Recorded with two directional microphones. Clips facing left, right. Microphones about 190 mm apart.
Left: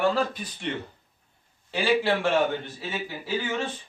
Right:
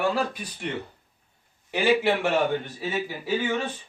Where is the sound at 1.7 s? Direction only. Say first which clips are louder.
Right 2 dB; 15° right (ahead or behind).